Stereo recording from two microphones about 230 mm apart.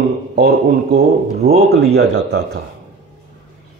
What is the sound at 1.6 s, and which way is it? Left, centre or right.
Speech, right.